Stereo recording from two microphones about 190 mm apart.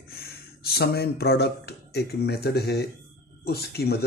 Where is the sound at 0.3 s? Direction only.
55° left (ahead or behind).